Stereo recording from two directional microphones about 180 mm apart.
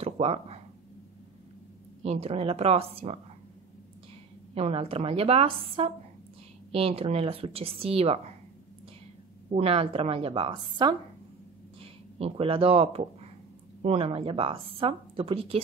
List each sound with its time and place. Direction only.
0.0 s a sound: 35° right (ahead or behind)
2.0 s speech: 35° right (ahead or behind)
4.6 s speech: 35° right (ahead or behind)
9.5 s speech: 35° right (ahead or behind)